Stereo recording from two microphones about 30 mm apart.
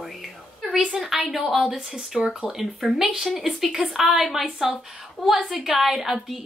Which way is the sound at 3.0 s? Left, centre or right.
Right.